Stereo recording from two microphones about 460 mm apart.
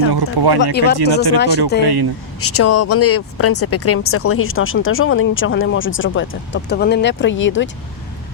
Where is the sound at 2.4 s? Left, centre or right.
Left.